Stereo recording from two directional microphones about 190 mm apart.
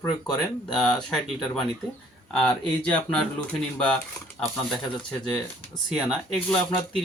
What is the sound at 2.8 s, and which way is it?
Speech, 5° left (ahead or behind).